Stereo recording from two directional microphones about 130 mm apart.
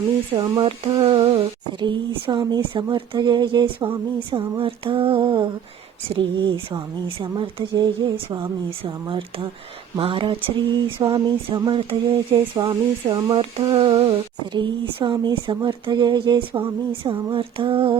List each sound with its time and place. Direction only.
0.3 s speech: 35° right (ahead or behind)